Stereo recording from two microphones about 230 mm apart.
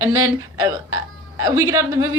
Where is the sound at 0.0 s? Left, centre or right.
Centre.